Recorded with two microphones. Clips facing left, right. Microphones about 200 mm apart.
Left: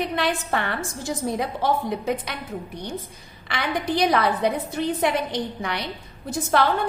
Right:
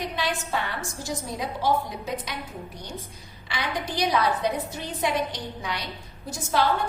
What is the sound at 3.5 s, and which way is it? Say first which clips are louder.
A woman's voice: left 5 dB; 60° left (ahead or behind).